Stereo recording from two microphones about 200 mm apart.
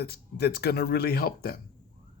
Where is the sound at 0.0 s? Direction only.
55° left (ahead or behind).